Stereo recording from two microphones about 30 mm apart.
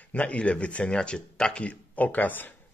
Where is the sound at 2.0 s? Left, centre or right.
Left.